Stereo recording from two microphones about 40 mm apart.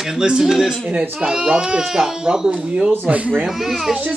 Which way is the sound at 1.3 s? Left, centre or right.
Centre.